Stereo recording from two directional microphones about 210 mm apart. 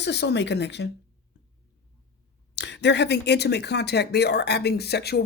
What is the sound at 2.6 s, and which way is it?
Speech, 55° left (ahead or behind).